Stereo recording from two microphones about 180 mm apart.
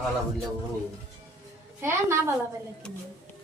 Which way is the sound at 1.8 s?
15° right (ahead or behind).